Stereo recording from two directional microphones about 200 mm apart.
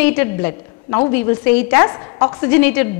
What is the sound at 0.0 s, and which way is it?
A woman's voice, 10° left (ahead or behind).